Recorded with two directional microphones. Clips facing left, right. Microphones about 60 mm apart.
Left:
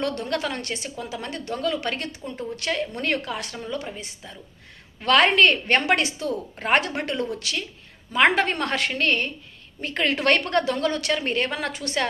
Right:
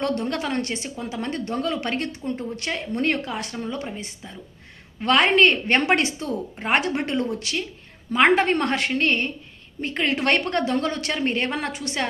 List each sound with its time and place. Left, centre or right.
0.0 s a woman's voice: right
5.0 s a woman's voice: right
6.6 s speech: centre
6.8 s a woman's voice: right